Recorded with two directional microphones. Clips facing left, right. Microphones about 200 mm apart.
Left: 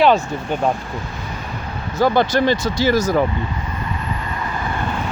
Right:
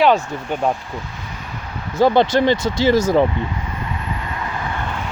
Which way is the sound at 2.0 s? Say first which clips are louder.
Right 2 dB; 25° right (ahead or behind).